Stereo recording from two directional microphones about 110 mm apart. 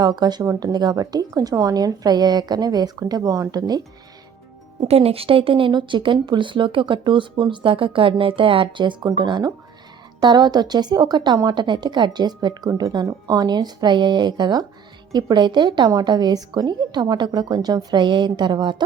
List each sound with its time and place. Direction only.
0.0 s a woman's voice: 40° right (ahead or behind)
4.8 s a woman's voice: 65° right (ahead or behind); by 18.8 s 45° right (ahead or behind)